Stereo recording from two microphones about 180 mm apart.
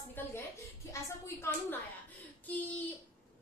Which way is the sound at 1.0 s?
15° left (ahead or behind).